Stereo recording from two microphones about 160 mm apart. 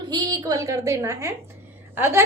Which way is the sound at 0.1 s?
25° right (ahead or behind).